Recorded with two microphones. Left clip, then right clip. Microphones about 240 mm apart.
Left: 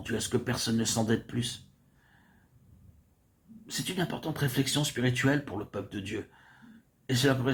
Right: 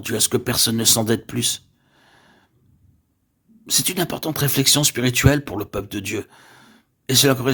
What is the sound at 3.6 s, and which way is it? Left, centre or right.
Speech, right.